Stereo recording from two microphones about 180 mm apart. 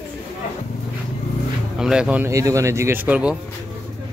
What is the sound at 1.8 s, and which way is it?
A man's voice, 5° right (ahead or behind).